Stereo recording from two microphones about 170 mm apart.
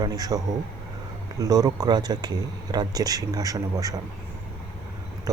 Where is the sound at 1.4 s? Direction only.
20° right (ahead or behind).